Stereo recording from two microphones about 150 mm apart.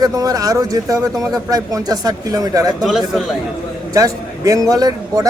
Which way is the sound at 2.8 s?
Centre (ahead or behind).